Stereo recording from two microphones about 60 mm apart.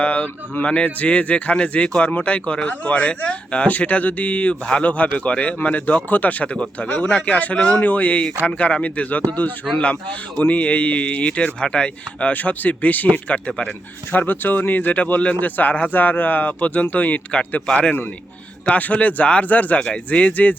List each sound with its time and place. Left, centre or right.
0.0 s speech: left
18.6 s speech: left